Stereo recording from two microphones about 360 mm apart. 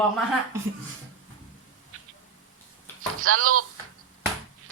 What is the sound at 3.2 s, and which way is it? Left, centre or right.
Speech, right.